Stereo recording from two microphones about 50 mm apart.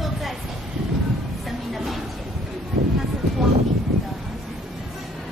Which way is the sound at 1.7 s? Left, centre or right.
Centre.